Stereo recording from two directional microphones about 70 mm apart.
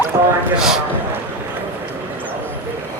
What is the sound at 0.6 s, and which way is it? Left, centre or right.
Speech, centre.